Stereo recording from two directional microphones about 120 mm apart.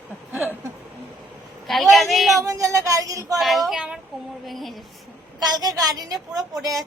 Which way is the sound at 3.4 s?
Centre (ahead or behind).